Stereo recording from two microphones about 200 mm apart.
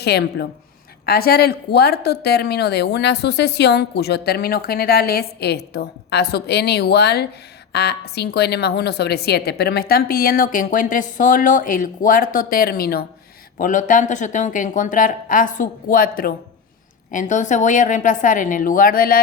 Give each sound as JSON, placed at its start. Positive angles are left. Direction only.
{"t": 0.0, "sound": "a woman's voice", "side_deg": 55}